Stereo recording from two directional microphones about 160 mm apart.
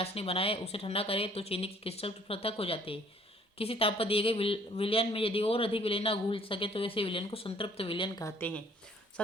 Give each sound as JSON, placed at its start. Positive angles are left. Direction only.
{"t": 0.0, "sound": "speech", "side_deg": 40}
{"t": 8.2, "sound": "speech", "side_deg": 10}